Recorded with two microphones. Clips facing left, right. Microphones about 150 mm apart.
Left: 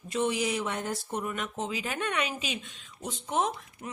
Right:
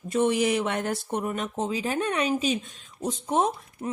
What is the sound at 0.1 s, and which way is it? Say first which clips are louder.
Speech: right 6 dB; 50° right (ahead or behind).